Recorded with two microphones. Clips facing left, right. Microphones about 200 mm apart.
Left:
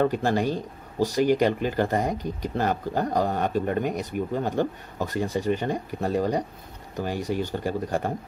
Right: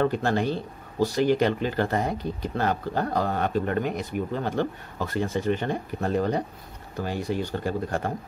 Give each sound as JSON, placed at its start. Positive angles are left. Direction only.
{"t": 0.0, "sound": "speech", "side_deg": 10}
{"t": 0.9, "sound": "speech", "side_deg": 40}
{"t": 1.2, "sound": "speech", "side_deg": 15}